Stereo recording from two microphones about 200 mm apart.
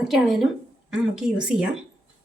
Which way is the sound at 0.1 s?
Centre (ahead or behind).